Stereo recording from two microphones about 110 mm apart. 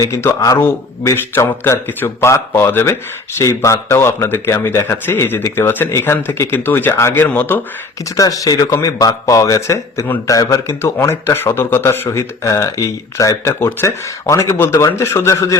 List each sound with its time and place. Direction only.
0.4 s a man's voice: 25° left (ahead or behind)
8.1 s a man's voice: 30° left (ahead or behind)